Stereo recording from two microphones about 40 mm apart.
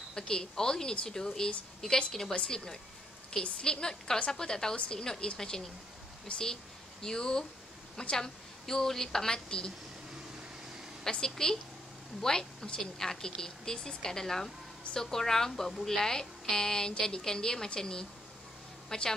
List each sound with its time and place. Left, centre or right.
0.1 s a woman's voice: centre
8.6 s a woman's voice: centre
11.1 s a woman's voice: centre